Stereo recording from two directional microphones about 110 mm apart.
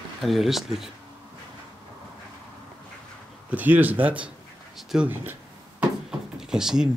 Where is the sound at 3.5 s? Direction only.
15° right (ahead or behind).